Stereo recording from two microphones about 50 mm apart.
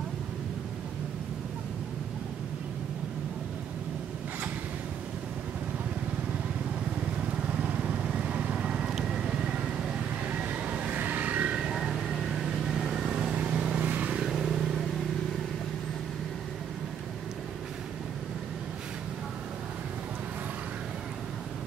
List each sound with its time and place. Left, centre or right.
7.8 s vehicle: right
10.4 s vehicle: right
11.5 s vehicle: centre; by 14.1 s right
14.1 s vehicle: centre